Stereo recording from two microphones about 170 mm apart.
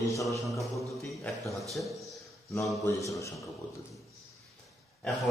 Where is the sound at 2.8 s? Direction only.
20° left (ahead or behind).